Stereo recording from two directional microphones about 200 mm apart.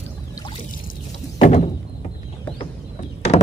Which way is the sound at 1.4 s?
35° left (ahead or behind).